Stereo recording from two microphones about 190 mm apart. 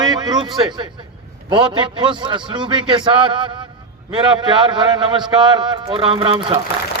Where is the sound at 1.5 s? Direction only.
25° right (ahead or behind).